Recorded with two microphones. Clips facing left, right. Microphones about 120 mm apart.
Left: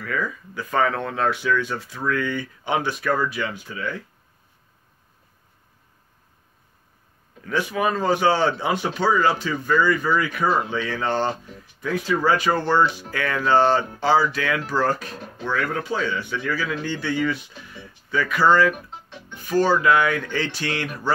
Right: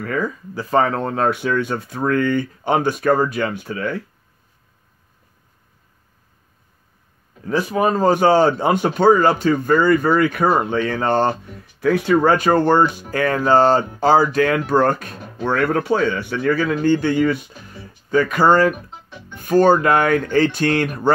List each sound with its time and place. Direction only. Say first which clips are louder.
0.0 s speech: right 5 dB; 45° right (ahead or behind)
7.4 s speech: right 5 dB; 40° right (ahead or behind)